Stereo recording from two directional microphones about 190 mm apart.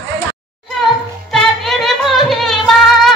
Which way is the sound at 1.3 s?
Centre (ahead or behind).